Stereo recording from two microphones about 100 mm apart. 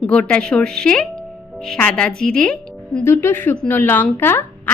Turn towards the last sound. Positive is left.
turn(degrees=20)  # may be behind; listen again after turning